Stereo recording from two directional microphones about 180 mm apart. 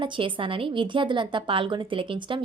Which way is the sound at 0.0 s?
30° right (ahead or behind).